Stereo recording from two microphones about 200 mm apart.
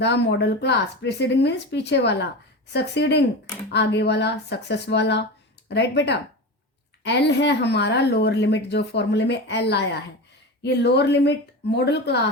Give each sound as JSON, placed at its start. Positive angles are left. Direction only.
{"t": 0.0, "sound": "speech", "side_deg": 60}